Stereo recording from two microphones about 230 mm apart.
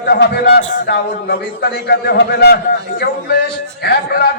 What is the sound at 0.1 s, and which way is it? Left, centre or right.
A man's voice, left.